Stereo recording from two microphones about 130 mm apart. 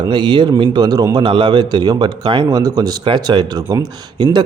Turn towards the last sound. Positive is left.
turn(degrees=-30)  # may be behind; listen again after turning